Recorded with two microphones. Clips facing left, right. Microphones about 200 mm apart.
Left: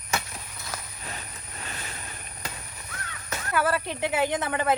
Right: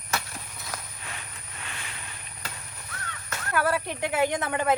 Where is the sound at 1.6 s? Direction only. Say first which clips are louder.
Left 3 dB; 40° left (ahead or behind).